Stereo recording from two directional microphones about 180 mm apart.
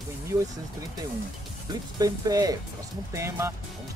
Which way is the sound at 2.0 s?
20° right (ahead or behind).